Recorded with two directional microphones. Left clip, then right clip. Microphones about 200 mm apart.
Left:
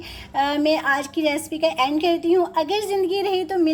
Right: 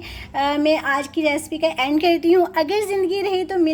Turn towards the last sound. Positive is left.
turn(degrees=-5)  # may be behind; listen again after turning